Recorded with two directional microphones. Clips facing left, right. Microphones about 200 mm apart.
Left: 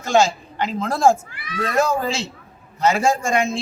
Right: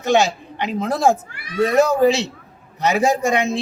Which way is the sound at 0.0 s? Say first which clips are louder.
Right 1 dB; 20° right (ahead or behind).